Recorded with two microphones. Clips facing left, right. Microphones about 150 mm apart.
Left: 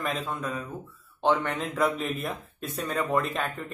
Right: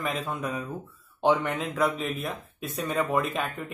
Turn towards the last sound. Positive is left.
turn(degrees=0)  # may be behind; listen again after turning